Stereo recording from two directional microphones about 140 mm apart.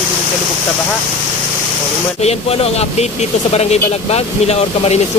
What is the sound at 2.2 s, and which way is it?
Speech, 45° left (ahead or behind).